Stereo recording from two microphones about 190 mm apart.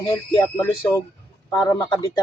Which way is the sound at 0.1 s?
15° left (ahead or behind).